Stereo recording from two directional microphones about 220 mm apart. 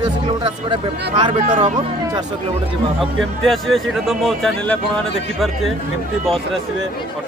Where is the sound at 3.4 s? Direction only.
Centre (ahead or behind).